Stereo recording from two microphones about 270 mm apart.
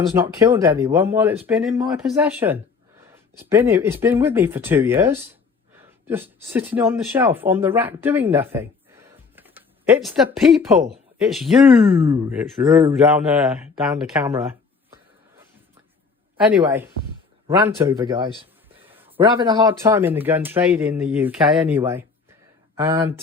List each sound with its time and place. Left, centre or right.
0.1 s speech: centre
9.3 s a sound: centre
11.2 s speech: centre
16.4 s a man's voice: centre